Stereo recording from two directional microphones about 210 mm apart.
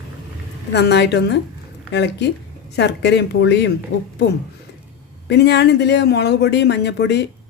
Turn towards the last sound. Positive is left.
turn(degrees=55)  # may be behind; listen again after turning